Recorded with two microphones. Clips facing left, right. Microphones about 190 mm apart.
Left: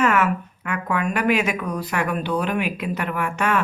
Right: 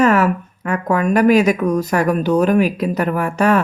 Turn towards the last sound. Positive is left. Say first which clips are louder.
# right 7 dB
turn(degrees=-35)  # may be behind; listen again after turning